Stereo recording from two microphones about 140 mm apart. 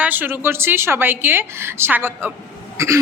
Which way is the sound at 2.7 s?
20° right (ahead or behind).